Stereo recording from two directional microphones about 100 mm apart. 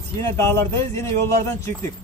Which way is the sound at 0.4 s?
30° left (ahead or behind).